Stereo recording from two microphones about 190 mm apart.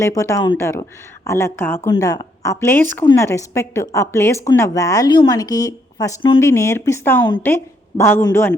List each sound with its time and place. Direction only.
0.0 s a woman's voice: 15° left (ahead or behind)